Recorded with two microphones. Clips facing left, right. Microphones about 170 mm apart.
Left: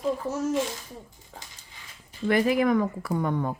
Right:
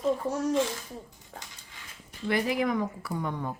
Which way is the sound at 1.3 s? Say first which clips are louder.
Right 1 dB; centre (ahead or behind).